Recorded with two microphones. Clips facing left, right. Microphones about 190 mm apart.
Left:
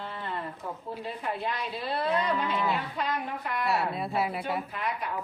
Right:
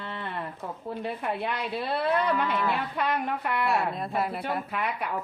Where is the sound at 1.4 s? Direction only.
65° right (ahead or behind).